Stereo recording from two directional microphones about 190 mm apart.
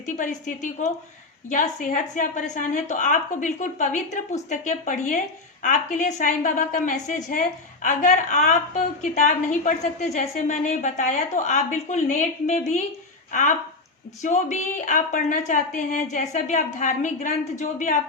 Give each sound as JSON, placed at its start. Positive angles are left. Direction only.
{"t": 0.0, "sound": "a woman's voice", "side_deg": 40}